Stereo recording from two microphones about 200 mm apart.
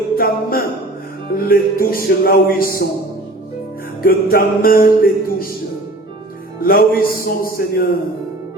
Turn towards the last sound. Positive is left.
turn(degrees=45)  # may be behind; listen again after turning